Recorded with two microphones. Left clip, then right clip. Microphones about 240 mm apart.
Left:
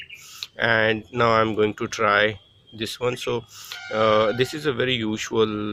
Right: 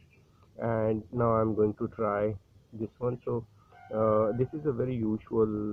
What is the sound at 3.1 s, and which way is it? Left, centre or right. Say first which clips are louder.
Speech: left 8 dB; left.